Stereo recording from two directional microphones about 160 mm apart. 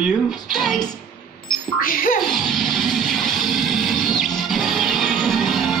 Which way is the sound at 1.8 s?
65° left (ahead or behind).